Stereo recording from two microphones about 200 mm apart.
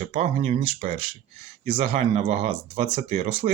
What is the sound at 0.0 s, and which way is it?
Speech, 30° right (ahead or behind).